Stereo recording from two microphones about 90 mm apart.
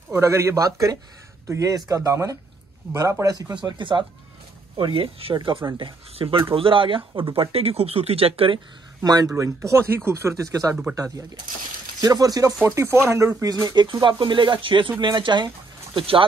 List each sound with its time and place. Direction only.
0.1 s speech: 30° right (ahead or behind)
3.5 s speech: 60° right (ahead or behind)
4.7 s speech: 85° right; by 6.2 s 65° right (ahead or behind)
6.5 s speech: 75° right (ahead or behind)
9.0 s speech: 45° right (ahead or behind)
9.3 s speech: 35° right (ahead or behind)
10.3 s speech: 40° right (ahead or behind)
12.0 s speech: 45° right (ahead or behind)
12.6 s speech: 30° right (ahead or behind)
13.5 s speech: 50° right (ahead or behind)
14.0 s speech: 60° right (ahead or behind)